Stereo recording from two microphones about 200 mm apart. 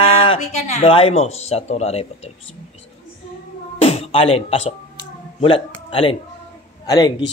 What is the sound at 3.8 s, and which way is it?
A man's voice, 30° left (ahead or behind).